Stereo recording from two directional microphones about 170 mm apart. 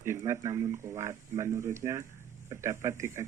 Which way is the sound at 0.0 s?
15° right (ahead or behind).